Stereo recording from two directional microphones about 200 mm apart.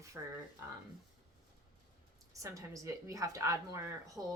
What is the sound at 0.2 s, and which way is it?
Speech, 15° right (ahead or behind).